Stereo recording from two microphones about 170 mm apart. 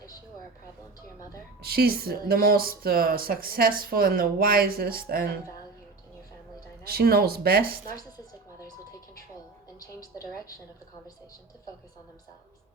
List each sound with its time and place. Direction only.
1.6 s speech: 65° right (ahead or behind)
6.8 s speech: 60° right (ahead or behind)
9.8 s a woman's voice: 20° left (ahead or behind)